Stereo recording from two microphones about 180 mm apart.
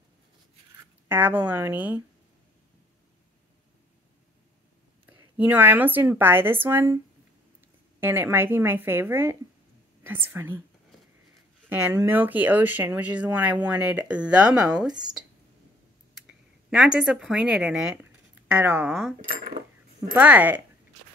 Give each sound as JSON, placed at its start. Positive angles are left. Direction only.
{"t": 1.0, "sound": "speech", "side_deg": -10}
{"t": 5.4, "sound": "speech", "side_deg": -10}
{"t": 8.0, "sound": "speech", "side_deg": -10}
{"t": 11.7, "sound": "speech", "side_deg": -10}
{"t": 14.9, "sound": "speech", "side_deg": -25}
{"t": 16.2, "sound": "speech", "side_deg": -5}
{"t": 19.2, "sound": "speech", "side_deg": -50}
{"t": 20.2, "sound": "speech", "side_deg": -10}